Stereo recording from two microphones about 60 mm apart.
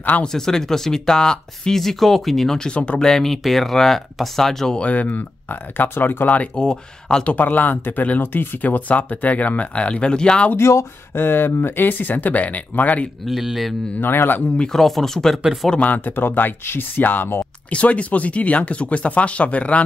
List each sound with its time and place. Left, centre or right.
0.2 s speech: centre
4.7 s speech: left
6.5 s speech: centre
7.3 s speech: left
10.5 s speech: left
13.2 s speech: centre
13.9 s speech: left
14.6 s speech: centre
15.8 s speech: left
17.6 s speech: left